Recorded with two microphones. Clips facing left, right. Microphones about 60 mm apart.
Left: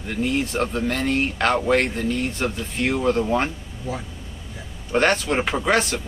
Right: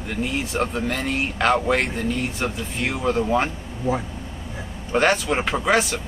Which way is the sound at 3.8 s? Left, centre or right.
Right.